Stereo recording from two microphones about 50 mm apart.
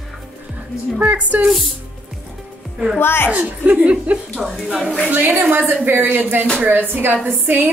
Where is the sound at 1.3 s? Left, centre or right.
Right.